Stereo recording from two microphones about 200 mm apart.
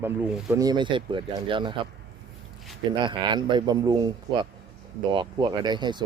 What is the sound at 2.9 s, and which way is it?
Speech, 25° right (ahead or behind).